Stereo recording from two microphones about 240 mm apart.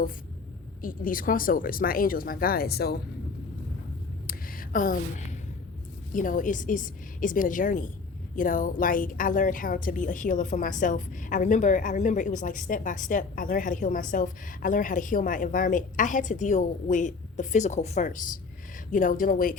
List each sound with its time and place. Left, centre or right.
0.8 s a woman's voice: left
4.3 s a sound: left
6.1 s a woman's voice: left